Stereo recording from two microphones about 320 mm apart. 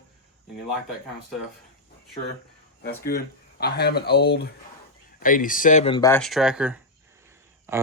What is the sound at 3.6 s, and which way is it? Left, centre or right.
Speech, left.